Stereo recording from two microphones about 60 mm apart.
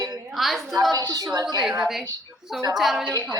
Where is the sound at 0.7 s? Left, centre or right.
Right.